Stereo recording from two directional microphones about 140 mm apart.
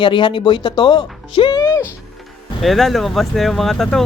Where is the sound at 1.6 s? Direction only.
20° left (ahead or behind).